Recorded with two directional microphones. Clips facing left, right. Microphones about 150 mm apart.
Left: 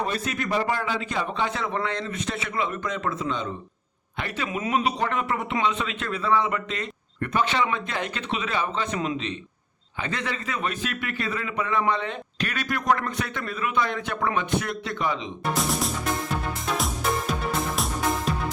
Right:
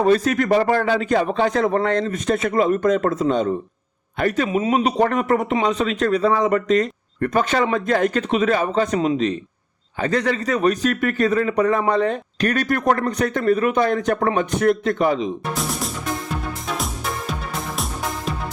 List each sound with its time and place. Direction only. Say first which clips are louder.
0.0 s a man's voice: right 11 dB; 45° right (ahead or behind)
4.4 s speech: right 8 dB; 25° right (ahead or behind)
4.7 s a man's voice: right 5 dB; 45° right (ahead or behind)
15.5 s music: even; centre (ahead or behind)